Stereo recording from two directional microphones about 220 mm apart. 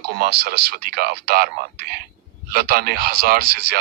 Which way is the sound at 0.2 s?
45° right (ahead or behind).